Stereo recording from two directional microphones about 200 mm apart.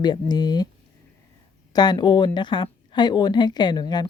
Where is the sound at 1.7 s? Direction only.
20° left (ahead or behind).